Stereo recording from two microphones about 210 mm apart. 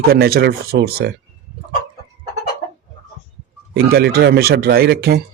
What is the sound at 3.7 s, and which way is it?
Speech, 50° right (ahead or behind).